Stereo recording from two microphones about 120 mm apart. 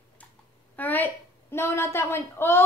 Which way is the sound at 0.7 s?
15° left (ahead or behind).